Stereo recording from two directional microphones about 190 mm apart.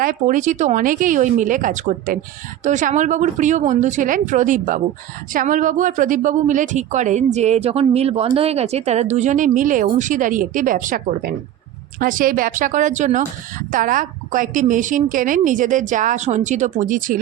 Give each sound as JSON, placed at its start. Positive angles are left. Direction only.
{"t": 0.0, "sound": "speech", "side_deg": -45}